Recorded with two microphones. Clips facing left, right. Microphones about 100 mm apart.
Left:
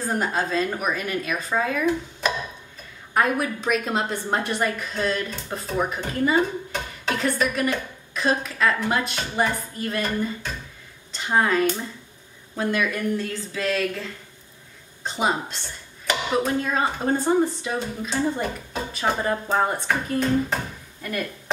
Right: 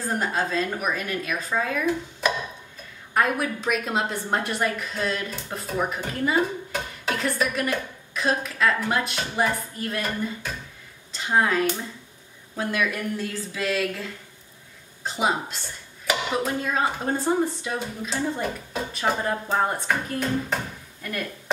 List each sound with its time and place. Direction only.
0.2 s a woman's voice: centre (ahead or behind)
2.2 s tick-tock: 5° right (ahead or behind)
3.2 s a woman's voice: centre (ahead or behind)
15.0 s a woman's voice: 5° right (ahead or behind)